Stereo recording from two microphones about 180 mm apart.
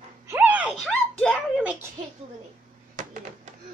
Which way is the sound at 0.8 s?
5° left (ahead or behind).